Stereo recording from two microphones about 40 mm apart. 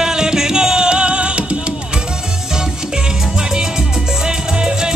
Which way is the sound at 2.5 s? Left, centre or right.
Centre.